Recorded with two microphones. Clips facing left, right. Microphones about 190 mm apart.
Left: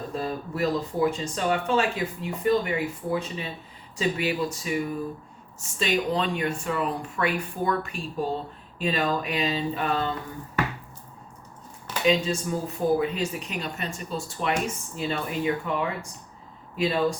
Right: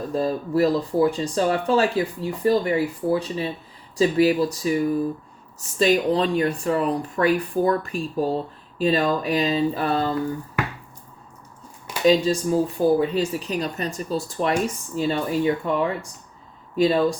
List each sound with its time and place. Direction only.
0.1 s speech: 35° right (ahead or behind)
12.0 s speech: 35° right (ahead or behind)